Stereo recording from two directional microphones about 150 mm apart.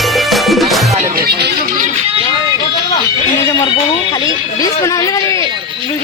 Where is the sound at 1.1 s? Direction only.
90° right.